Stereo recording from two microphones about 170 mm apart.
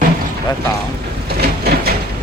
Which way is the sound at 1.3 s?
65° right (ahead or behind).